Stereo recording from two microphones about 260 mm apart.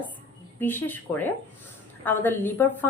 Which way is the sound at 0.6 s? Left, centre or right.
Centre.